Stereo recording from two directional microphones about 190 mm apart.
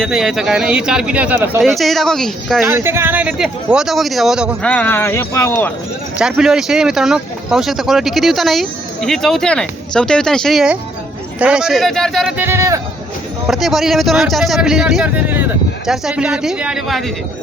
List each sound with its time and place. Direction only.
0.0 s speech: centre (ahead or behind)
1.6 s speech: centre (ahead or behind)
2.6 s speech: 15° right (ahead or behind)
4.7 s speech: 10° left (ahead or behind)
6.1 s speech: 5° right (ahead or behind)
12.4 s speech: 15° right (ahead or behind)
13.5 s speech: centre (ahead or behind)